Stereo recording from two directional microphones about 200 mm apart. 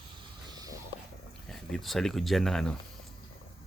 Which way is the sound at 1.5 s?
Centre (ahead or behind).